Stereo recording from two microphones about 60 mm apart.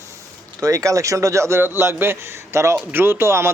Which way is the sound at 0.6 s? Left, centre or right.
Right.